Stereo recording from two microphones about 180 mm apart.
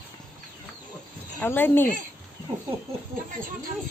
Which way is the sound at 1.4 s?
10° left (ahead or behind).